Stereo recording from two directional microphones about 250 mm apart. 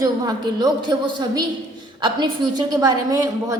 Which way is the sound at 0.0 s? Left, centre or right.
Centre.